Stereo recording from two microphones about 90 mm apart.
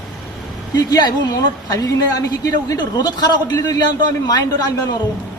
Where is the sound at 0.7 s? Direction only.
50° left (ahead or behind).